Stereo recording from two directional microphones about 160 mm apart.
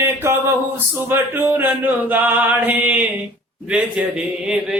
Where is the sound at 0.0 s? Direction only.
15° right (ahead or behind).